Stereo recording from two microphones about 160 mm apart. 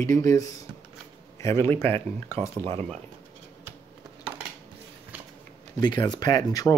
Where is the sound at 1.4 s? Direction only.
15° left (ahead or behind).